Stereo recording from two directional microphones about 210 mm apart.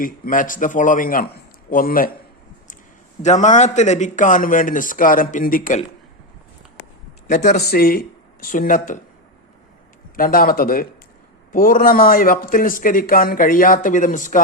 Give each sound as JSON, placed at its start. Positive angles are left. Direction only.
{"t": 0.0, "sound": "a man's voice", "side_deg": 40}
{"t": 3.2, "sound": "a man's voice", "side_deg": 35}
{"t": 7.3, "sound": "speech", "side_deg": 40}
{"t": 10.2, "sound": "a man's voice", "side_deg": 45}